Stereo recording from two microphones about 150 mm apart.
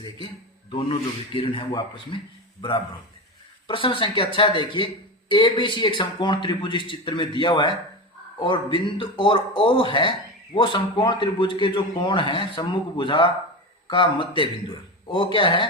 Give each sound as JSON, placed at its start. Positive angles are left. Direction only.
{"t": 0.7, "sound": "speech", "side_deg": 35}
{"t": 3.7, "sound": "speech", "side_deg": 35}